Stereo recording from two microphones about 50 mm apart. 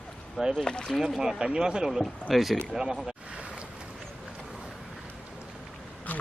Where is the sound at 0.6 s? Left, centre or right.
Centre.